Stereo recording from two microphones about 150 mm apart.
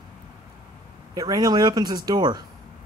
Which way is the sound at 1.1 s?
25° right (ahead or behind).